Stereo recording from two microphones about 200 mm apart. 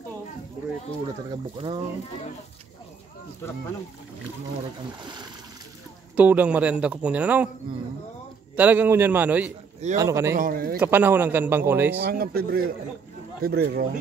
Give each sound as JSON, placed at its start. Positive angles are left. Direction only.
{"t": 1.3, "sound": "speech", "side_deg": -25}
{"t": 6.1, "sound": "a man's voice", "side_deg": -5}
{"t": 8.5, "sound": "a man's voice", "side_deg": -10}
{"t": 10.3, "sound": "speech", "side_deg": -45}
{"t": 10.8, "sound": "a man's voice", "side_deg": -10}
{"t": 12.0, "sound": "speech", "side_deg": -50}